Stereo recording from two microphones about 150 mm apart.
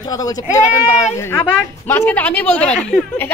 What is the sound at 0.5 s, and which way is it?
Speech, 15° left (ahead or behind).